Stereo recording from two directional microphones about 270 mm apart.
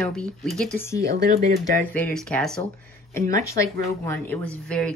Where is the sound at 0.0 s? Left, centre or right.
Centre.